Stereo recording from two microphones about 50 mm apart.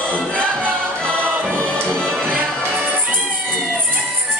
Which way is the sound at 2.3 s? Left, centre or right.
Right.